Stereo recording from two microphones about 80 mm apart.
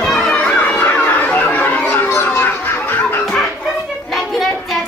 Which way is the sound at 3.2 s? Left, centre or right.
Centre.